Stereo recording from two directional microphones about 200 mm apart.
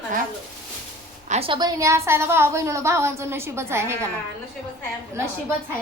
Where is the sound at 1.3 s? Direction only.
25° right (ahead or behind).